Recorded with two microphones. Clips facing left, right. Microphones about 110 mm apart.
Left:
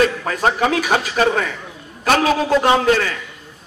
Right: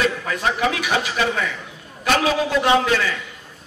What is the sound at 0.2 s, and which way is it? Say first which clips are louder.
A man's voice: left 3 dB; 45° left (ahead or behind).